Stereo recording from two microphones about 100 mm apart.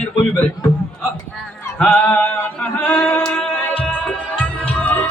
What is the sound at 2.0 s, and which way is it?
Singing, 20° left (ahead or behind).